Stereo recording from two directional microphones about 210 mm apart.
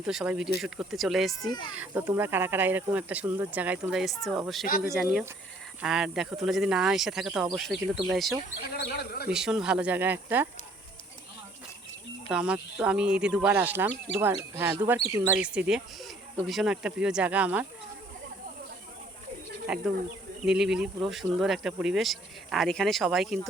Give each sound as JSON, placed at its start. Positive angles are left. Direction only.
{"t": 0.0, "sound": "speech", "side_deg": -5}
{"t": 4.6, "sound": "speech", "side_deg": 45}
{"t": 5.8, "sound": "speech", "side_deg": -5}
{"t": 8.7, "sound": "speech", "side_deg": 50}
{"t": 9.3, "sound": "speech", "side_deg": -5}
{"t": 12.3, "sound": "speech", "side_deg": -5}
{"t": 19.6, "sound": "speech", "side_deg": -5}